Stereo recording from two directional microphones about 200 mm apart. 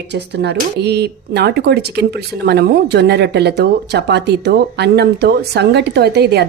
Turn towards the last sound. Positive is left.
turn(degrees=-55)  # may be behind; listen again after turning